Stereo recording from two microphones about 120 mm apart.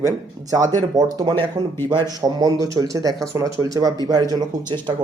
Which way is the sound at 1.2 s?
40° right (ahead or behind).